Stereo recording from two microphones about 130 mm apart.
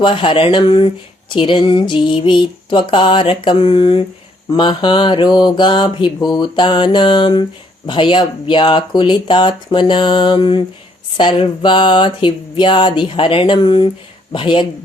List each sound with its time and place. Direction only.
0.0 s speech: 40° left (ahead or behind)